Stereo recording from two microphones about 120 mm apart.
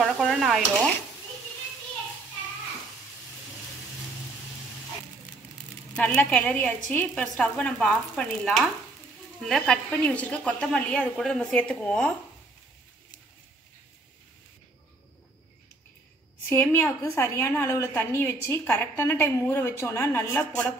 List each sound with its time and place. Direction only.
0.0 s stir: centre (ahead or behind)
5.9 s a woman's voice: 10° left (ahead or behind)
16.4 s a woman's voice: 20° left (ahead or behind)